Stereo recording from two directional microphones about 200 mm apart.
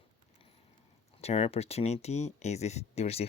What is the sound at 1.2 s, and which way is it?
Speech, 30° left (ahead or behind).